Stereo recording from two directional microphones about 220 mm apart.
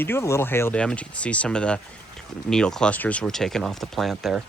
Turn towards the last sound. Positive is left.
turn(degrees=0)  # may be behind; listen again after turning